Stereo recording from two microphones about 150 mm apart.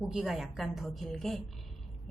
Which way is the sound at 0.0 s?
Centre (ahead or behind).